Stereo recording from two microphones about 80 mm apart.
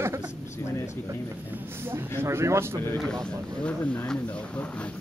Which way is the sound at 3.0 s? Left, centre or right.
Centre.